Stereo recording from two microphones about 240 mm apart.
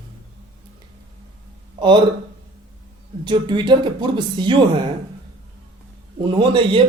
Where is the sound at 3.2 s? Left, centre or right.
Centre.